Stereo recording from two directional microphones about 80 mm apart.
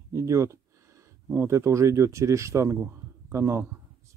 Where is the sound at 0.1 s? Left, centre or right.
Right.